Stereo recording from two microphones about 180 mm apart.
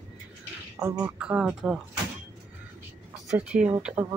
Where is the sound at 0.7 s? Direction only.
10° right (ahead or behind).